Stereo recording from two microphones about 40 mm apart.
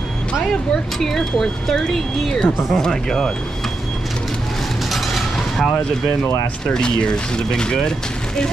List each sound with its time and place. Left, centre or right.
0.9 s speech: centre
4.9 s mechanisms: centre
6.7 s speech: left